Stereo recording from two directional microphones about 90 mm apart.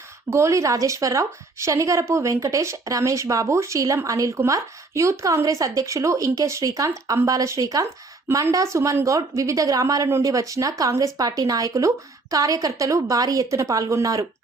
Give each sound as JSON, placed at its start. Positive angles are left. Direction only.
{"t": 0.3, "sound": "a woman's voice", "side_deg": -30}